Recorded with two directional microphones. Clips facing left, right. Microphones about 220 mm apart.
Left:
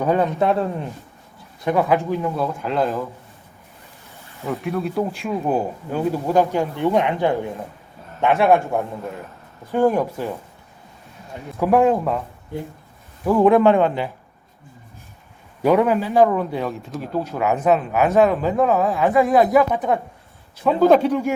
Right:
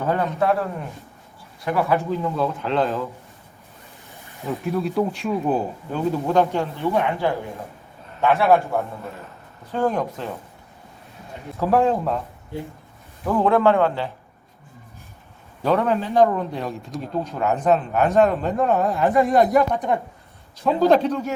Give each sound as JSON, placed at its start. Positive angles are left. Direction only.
{"t": 0.0, "sound": "speech", "side_deg": 15}
{"t": 1.7, "sound": "speech", "side_deg": 15}
{"t": 4.5, "sound": "speech", "side_deg": 0}
{"t": 9.7, "sound": "speech", "side_deg": 10}
{"t": 11.5, "sound": "speech", "side_deg": 15}
{"t": 13.2, "sound": "speech", "side_deg": 10}
{"t": 15.6, "sound": "a man's voice", "side_deg": 10}
{"t": 21.0, "sound": "speech", "side_deg": 10}